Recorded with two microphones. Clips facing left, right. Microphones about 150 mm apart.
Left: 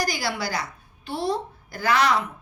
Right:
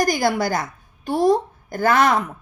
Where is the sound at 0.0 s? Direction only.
50° right (ahead or behind).